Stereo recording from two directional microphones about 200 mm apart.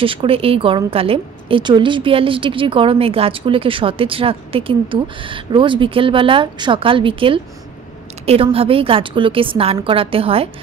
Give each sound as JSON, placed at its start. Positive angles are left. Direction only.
{"t": 0.0, "sound": "a woman's voice", "side_deg": -25}